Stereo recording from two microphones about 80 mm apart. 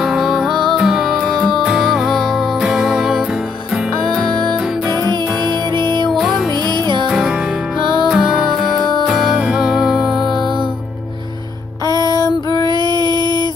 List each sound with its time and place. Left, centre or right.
0.0 s music: centre
4.0 s music: centre
5.5 s music: right
6.0 s music: centre
6.5 s music: right
7.1 s music: centre
9.4 s music: centre
11.8 s female singing: left
12.6 s a sound: right